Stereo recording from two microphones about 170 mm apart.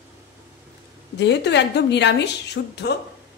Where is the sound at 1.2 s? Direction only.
85° left.